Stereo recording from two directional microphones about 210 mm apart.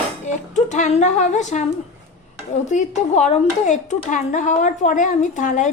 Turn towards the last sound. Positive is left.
turn(degrees=35)  # may be behind; listen again after turning